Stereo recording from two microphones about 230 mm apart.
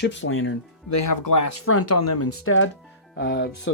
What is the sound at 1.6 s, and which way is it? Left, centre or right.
Speech, left.